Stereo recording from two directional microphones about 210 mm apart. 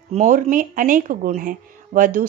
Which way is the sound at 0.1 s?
35° right (ahead or behind).